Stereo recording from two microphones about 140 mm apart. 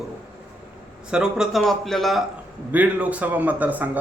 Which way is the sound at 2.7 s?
10° right (ahead or behind).